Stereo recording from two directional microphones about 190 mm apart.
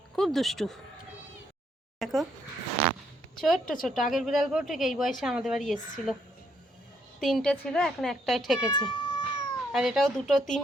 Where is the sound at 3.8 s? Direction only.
Centre (ahead or behind).